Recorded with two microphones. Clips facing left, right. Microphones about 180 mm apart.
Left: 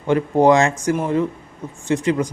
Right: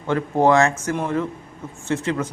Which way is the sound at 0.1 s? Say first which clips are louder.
Left 3 dB; 15° left (ahead or behind).